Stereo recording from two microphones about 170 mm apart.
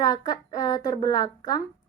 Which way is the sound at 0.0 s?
20° left (ahead or behind).